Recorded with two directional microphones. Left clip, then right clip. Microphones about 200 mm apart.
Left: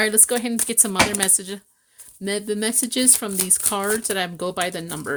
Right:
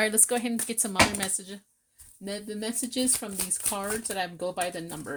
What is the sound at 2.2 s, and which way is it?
Speech, 50° left (ahead or behind).